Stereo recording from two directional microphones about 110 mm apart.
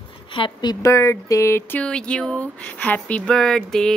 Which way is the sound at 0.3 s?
45° left (ahead or behind).